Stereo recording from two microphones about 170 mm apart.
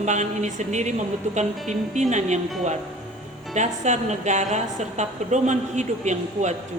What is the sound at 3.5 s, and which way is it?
A woman's voice, 45° right (ahead or behind).